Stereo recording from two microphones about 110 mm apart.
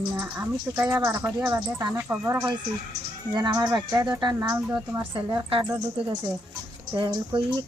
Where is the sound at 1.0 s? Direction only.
25° right (ahead or behind).